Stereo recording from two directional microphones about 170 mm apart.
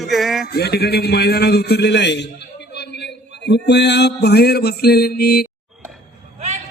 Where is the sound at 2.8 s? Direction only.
85° left; by 5.5 s 65° left (ahead or behind).